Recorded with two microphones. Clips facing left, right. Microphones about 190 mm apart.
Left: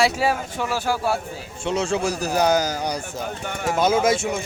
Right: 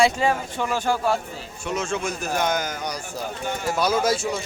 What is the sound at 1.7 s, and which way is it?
Speech, 30° left (ahead or behind).